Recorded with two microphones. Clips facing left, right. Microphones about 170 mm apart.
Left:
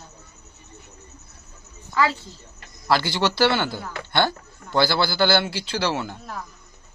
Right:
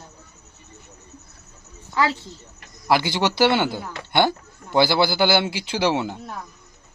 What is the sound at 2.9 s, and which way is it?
Speech, 20° right (ahead or behind).